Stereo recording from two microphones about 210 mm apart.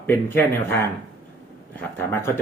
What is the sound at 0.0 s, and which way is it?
Speech, 10° left (ahead or behind).